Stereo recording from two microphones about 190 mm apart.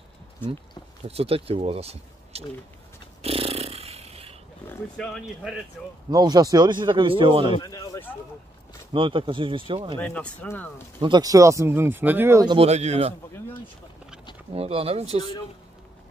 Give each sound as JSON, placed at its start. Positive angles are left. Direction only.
{"t": 1.0, "sound": "speech", "side_deg": -30}
{"t": 3.2, "sound": "a sound", "side_deg": -30}
{"t": 4.6, "sound": "speech", "side_deg": 5}
{"t": 6.0, "sound": "speech", "side_deg": -20}
{"t": 7.5, "sound": "speech", "side_deg": 20}
{"t": 8.9, "sound": "speech", "side_deg": -25}
{"t": 9.9, "sound": "speech", "side_deg": 5}
{"t": 11.0, "sound": "speech", "side_deg": -20}
{"t": 12.4, "sound": "speech", "side_deg": -30}
{"t": 14.5, "sound": "speech", "side_deg": -30}